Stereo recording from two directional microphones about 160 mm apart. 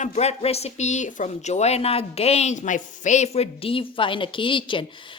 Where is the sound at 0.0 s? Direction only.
40° left (ahead or behind).